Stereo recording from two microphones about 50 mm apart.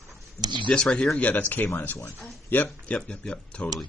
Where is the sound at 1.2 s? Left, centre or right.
Left.